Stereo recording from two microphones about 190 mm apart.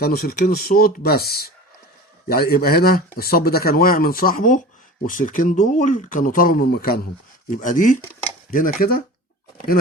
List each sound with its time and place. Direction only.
0.0 s speech: 55° left (ahead or behind)
7.5 s speech: 45° left (ahead or behind)